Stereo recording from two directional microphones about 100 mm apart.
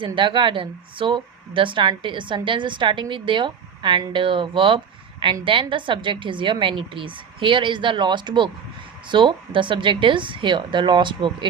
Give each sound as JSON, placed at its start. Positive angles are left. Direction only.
{"t": 0.0, "sound": "speech", "side_deg": -55}